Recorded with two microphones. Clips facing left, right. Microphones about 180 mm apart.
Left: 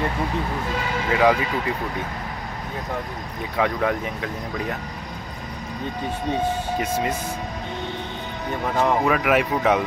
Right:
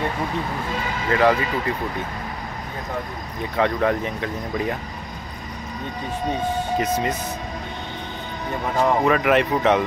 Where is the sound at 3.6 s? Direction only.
5° left (ahead or behind).